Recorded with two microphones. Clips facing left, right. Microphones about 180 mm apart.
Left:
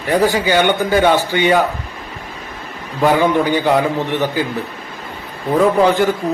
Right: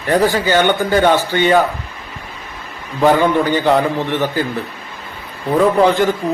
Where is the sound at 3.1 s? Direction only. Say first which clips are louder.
Right 1 dB; 15° left (ahead or behind).